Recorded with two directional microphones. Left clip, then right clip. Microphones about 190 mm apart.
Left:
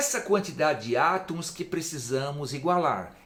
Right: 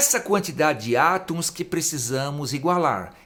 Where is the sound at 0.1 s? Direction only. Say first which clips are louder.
Right 4 dB; 55° right (ahead or behind).